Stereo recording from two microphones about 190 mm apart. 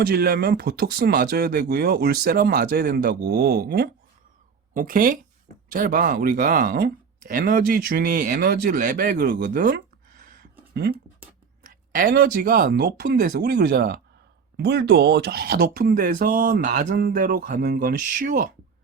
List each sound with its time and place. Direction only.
0.0 s speech: 50° right (ahead or behind)
4.7 s speech: 45° right (ahead or behind)
11.6 s speech: 50° right (ahead or behind)